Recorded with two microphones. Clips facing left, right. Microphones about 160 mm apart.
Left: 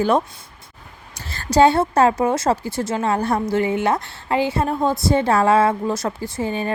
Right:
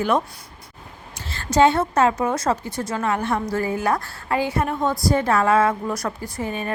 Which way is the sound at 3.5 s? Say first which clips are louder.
Left 4 dB; 25° left (ahead or behind).